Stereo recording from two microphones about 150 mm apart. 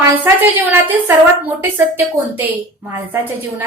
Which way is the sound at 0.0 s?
15° right (ahead or behind).